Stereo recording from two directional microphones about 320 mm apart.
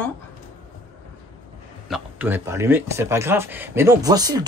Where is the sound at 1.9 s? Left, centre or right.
Centre.